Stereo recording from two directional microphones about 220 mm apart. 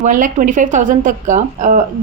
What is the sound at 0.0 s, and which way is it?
A woman's voice, 35° right (ahead or behind).